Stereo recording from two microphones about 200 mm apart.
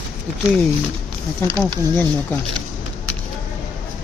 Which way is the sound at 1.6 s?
10° left (ahead or behind).